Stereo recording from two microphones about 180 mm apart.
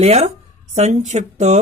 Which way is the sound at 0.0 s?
35° right (ahead or behind).